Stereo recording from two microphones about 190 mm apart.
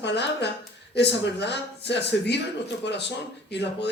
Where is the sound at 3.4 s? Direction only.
65° left (ahead or behind).